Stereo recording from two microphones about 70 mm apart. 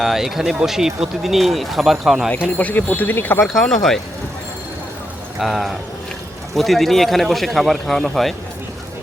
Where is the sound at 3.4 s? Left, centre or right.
Centre.